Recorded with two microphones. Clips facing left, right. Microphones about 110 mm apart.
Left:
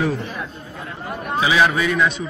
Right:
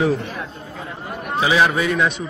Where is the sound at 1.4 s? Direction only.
40° right (ahead or behind).